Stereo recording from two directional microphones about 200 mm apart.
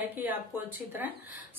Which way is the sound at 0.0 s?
10° right (ahead or behind).